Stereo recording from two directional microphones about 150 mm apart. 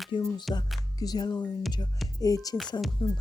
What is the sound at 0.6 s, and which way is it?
Speech, 25° left (ahead or behind).